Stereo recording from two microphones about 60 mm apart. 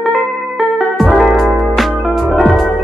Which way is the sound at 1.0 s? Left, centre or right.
Centre.